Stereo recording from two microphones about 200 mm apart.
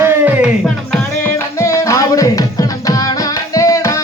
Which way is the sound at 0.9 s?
15° left (ahead or behind).